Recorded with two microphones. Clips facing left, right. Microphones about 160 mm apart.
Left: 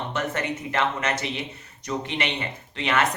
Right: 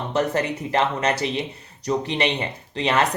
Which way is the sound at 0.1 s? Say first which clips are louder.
Right 8 dB; 35° right (ahead or behind).